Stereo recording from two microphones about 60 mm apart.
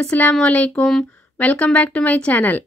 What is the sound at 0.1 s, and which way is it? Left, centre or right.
Chime, left.